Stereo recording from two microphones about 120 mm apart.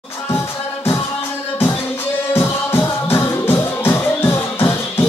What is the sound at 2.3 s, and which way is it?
Music, 20° left (ahead or behind).